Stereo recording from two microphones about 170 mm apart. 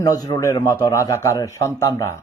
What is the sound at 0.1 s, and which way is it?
A man's voice, 20° left (ahead or behind).